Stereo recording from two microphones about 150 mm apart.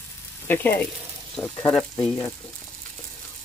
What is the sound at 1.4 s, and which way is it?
Speech, 25° left (ahead or behind).